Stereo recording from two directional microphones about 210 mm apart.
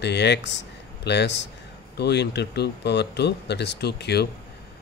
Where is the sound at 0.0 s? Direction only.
55° left (ahead or behind).